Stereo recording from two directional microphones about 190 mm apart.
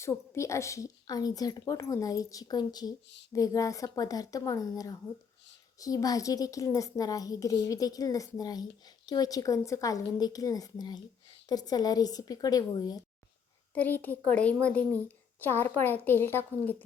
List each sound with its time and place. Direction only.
0.0 s a woman's voice: 15° left (ahead or behind)
13.7 s a child's voice: 10° left (ahead or behind)